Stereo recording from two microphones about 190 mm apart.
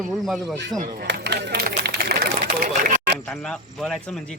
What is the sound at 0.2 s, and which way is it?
Speech, centre (ahead or behind).